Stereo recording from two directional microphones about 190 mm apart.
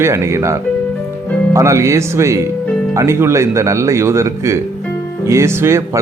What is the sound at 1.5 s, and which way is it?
Speech, 15° right (ahead or behind).